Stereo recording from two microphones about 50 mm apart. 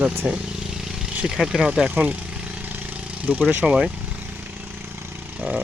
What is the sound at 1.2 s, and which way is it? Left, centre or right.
Speech, centre.